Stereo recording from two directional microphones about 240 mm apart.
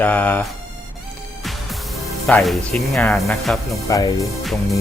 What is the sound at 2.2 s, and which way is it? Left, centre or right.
Speech, centre.